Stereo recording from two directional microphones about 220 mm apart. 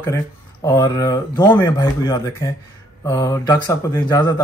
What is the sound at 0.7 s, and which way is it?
Speech, 15° left (ahead or behind).